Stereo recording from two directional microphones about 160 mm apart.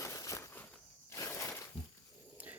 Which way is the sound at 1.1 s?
15° left (ahead or behind).